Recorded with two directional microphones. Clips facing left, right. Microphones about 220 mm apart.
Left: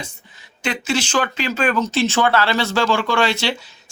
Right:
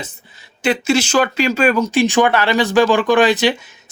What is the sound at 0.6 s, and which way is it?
Speech, 10° right (ahead or behind).